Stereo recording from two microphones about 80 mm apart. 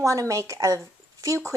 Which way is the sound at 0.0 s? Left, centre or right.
Right.